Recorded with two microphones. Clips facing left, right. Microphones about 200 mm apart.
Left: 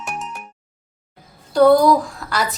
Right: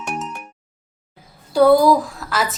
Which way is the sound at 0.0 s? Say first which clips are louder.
Right 2 dB; centre (ahead or behind).